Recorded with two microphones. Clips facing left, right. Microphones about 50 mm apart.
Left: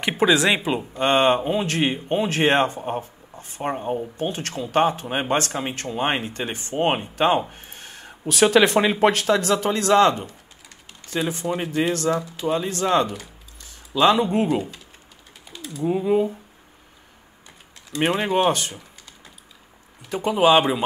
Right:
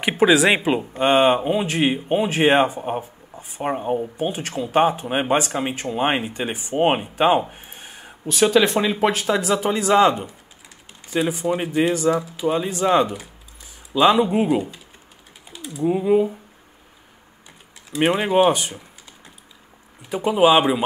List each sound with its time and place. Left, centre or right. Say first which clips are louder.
0.2 s speech: right 3 dB; centre
17.9 s speech: right 3 dB; centre
20.1 s speech: right 1 dB; centre